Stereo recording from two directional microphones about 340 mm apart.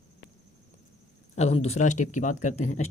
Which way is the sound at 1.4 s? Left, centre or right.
Centre.